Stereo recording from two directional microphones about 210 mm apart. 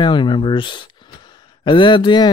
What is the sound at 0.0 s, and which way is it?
Speech, 20° left (ahead or behind).